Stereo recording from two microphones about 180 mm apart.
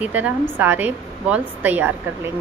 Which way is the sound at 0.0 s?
10° right (ahead or behind).